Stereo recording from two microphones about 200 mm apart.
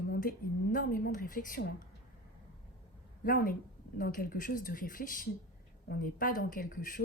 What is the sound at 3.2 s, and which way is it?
Speech, 45° left (ahead or behind).